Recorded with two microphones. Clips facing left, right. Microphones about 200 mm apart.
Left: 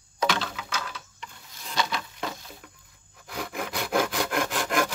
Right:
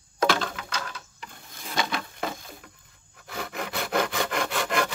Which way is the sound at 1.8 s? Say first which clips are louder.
Even; 50° right (ahead or behind).